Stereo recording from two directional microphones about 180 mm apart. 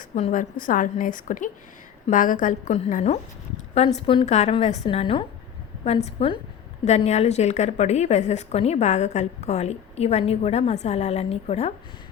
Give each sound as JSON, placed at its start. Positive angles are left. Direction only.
{"t": 0.2, "sound": "a woman's voice", "side_deg": 40}